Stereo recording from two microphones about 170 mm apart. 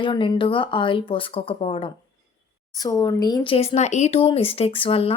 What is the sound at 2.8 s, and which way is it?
Speech, 20° left (ahead or behind).